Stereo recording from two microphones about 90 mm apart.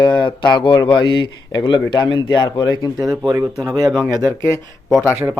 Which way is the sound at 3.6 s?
45° right (ahead or behind).